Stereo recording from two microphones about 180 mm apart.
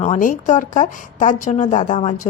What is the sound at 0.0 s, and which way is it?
A woman's voice, 45° left (ahead or behind).